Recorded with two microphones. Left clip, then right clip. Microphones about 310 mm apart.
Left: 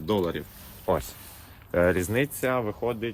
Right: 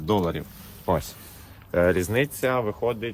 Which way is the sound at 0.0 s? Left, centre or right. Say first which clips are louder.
Right 2 dB; centre.